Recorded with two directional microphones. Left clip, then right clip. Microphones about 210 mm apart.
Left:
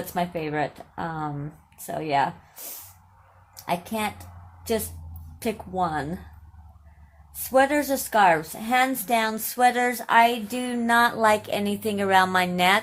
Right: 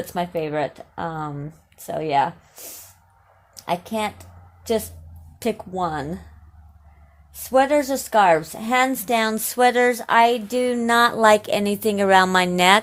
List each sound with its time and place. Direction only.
0.0 s a woman's voice: 30° right (ahead or behind)
7.3 s a woman's voice: 30° right (ahead or behind)